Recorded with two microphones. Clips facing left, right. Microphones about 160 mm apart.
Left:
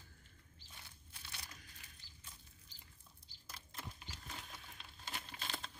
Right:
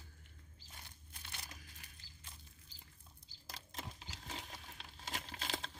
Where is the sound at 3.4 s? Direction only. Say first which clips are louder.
Right 3 dB; 90° right.